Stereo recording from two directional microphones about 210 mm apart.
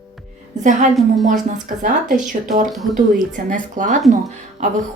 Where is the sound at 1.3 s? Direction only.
35° right (ahead or behind).